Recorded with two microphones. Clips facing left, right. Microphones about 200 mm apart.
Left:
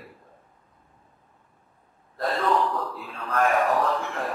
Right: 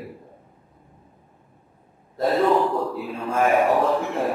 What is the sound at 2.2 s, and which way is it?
A man's voice, 15° right (ahead or behind).